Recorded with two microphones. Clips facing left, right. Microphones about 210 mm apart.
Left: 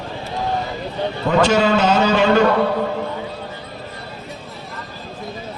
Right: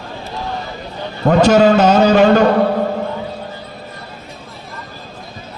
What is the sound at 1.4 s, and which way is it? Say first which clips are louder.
Speech: right 7 dB; 40° right (ahead or behind).